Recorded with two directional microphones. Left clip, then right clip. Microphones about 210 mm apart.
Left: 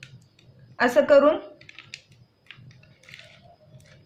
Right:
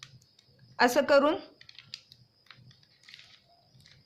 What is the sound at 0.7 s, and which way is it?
Speech, 50° right (ahead or behind).